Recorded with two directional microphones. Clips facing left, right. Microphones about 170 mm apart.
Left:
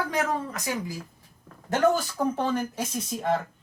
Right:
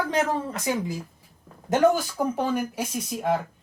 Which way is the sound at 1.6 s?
15° right (ahead or behind).